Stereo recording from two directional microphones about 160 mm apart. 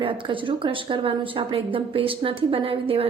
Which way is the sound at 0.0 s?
30° right (ahead or behind).